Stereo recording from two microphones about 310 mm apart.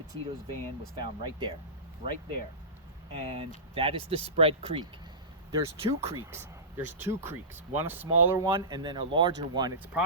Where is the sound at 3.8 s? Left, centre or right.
Centre.